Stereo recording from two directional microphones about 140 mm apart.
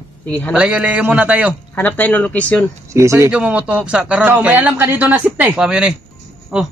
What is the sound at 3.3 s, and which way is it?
A man's voice, 10° right (ahead or behind).